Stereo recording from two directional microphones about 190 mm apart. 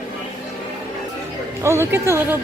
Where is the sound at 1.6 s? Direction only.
15° right (ahead or behind).